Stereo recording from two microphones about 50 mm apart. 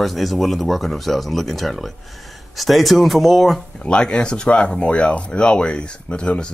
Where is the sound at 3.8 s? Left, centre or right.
Centre.